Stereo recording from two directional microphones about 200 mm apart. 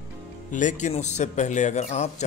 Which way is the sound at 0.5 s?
40° left (ahead or behind).